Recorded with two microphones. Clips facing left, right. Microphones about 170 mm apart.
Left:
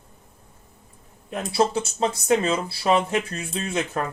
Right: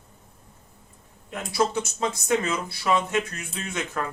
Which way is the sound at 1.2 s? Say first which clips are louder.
Left 3 dB; 30° left (ahead or behind).